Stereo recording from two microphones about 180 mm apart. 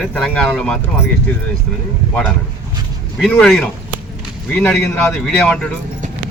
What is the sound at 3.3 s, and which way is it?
Speech, 5° left (ahead or behind).